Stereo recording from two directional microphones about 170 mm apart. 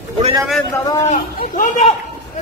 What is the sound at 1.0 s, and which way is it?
Speech, 50° left (ahead or behind).